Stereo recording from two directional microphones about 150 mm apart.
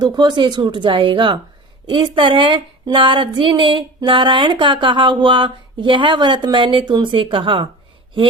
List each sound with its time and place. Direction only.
0.0 s speech: 30° right (ahead or behind)